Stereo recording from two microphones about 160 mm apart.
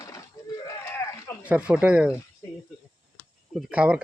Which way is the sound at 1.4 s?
10° right (ahead or behind).